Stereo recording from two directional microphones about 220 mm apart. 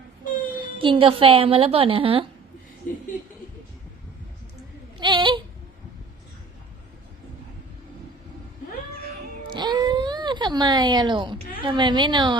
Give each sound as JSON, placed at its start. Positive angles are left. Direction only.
{"t": 0.5, "sound": "a woman's voice", "side_deg": -25}
{"t": 2.8, "sound": "a sound", "side_deg": 35}
{"t": 4.9, "sound": "speech", "side_deg": -20}
{"t": 9.5, "sound": "speech", "side_deg": -20}